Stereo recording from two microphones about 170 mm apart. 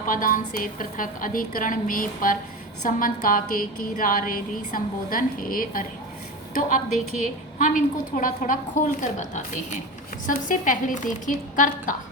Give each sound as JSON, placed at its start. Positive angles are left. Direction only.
{"t": 0.1, "sound": "a woman's voice", "side_deg": 55}